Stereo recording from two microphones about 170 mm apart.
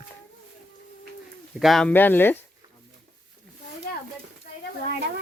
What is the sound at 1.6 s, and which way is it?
Speech, centre (ahead or behind).